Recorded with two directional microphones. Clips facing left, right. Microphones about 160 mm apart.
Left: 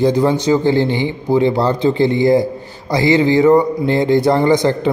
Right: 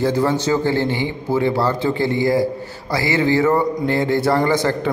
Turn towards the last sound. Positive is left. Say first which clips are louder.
# left 5 dB
turn(degrees=20)  # may be behind; listen again after turning